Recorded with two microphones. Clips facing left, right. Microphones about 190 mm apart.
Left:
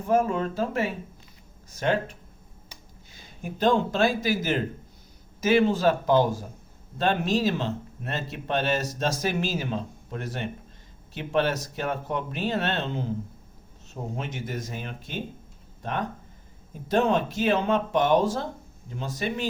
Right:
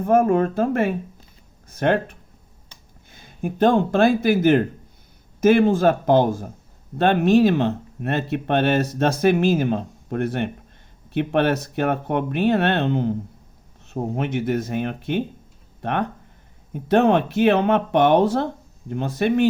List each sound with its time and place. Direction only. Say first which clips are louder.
0.0 s speech: right 7 dB; 55° right (ahead or behind)